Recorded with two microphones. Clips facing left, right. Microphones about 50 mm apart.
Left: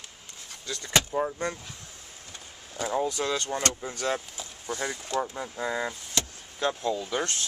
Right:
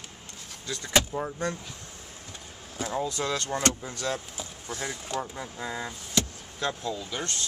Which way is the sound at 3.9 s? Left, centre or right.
Left.